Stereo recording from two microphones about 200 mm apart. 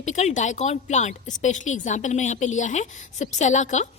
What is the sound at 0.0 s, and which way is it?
A woman's voice, 35° left (ahead or behind).